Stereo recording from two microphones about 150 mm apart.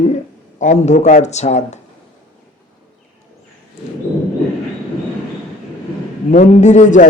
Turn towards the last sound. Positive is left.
turn(degrees=55)  # may be behind; listen again after turning